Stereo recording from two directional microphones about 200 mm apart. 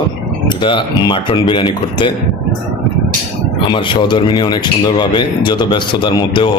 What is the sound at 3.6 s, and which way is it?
A man's voice, 25° left (ahead or behind).